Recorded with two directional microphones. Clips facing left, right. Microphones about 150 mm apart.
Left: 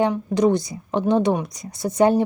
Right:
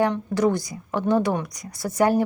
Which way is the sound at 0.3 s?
20° left (ahead or behind).